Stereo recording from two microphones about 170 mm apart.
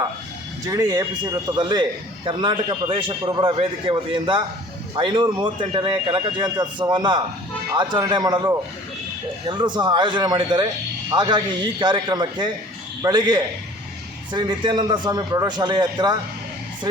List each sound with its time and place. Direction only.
0.7 s speech: 20° right (ahead or behind)